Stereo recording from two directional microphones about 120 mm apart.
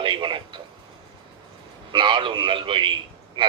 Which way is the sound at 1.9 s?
45° right (ahead or behind).